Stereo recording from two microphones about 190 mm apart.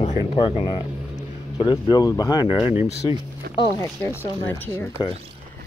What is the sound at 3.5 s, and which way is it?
Speech, 55° right (ahead or behind).